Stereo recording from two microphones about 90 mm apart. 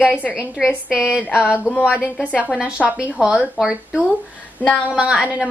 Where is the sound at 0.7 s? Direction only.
20° left (ahead or behind).